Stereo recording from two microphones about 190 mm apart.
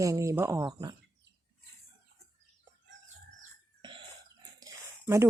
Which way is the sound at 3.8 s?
25° right (ahead or behind).